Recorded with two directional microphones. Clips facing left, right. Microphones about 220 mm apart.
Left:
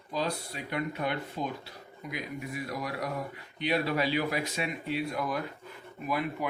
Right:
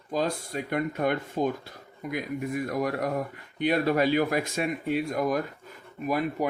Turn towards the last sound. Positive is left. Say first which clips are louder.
# right 5 dB
turn(degrees=-45)  # may be behind; listen again after turning